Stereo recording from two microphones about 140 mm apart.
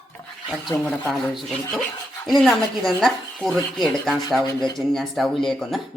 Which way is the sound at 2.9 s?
5° left (ahead or behind).